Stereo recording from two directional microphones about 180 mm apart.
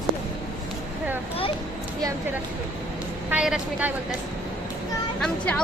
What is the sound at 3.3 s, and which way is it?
Speech, 5° right (ahead or behind).